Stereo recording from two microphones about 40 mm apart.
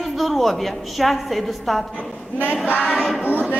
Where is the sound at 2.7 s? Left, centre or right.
Left.